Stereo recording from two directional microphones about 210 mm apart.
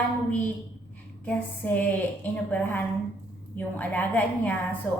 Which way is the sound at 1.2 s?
5° left (ahead or behind).